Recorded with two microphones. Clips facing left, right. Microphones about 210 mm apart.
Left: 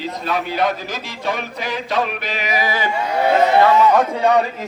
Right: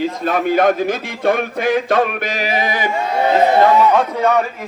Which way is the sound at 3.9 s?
10° left (ahead or behind).